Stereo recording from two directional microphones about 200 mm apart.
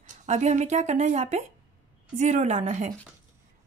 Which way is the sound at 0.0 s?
35° right (ahead or behind).